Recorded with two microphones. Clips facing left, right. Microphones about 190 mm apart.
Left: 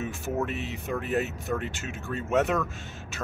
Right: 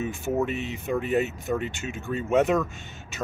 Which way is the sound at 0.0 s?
Centre (ahead or behind).